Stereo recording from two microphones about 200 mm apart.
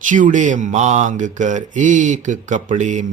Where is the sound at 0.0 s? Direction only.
40° right (ahead or behind).